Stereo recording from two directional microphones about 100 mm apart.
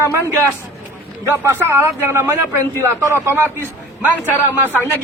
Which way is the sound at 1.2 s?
25° right (ahead or behind).